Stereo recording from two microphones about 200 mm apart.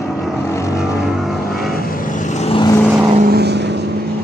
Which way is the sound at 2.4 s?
30° left (ahead or behind).